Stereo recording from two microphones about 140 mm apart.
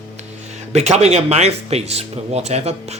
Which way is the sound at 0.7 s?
50° right (ahead or behind).